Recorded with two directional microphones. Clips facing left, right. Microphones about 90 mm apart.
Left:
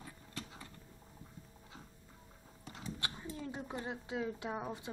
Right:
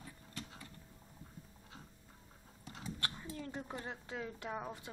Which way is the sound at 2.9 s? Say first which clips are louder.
Even; 15° left (ahead or behind).